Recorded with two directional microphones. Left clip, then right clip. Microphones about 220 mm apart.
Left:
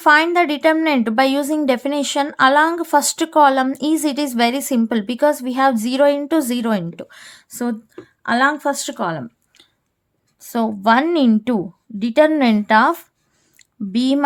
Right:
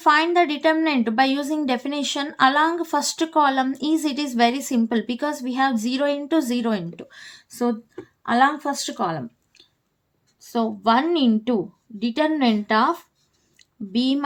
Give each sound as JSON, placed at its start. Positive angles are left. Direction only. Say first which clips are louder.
{"t": 0.0, "sound": "a woman's voice", "louder": "left 4 dB", "side_deg": 35}
{"t": 10.4, "sound": "a woman's voice", "louder": "left 4 dB", "side_deg": 40}
{"t": 13.6, "sound": "a sound", "louder": "left 3 dB", "side_deg": 40}